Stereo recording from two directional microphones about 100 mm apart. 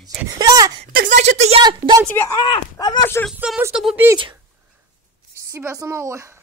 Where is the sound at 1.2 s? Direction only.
90° right.